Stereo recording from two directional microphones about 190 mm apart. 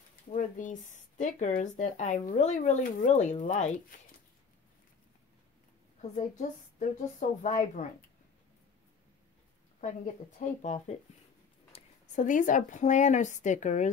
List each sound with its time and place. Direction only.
0.3 s speech: 45° left (ahead or behind)
5.9 s speech: 40° left (ahead or behind)
10.4 s a woman's voice: 40° left (ahead or behind)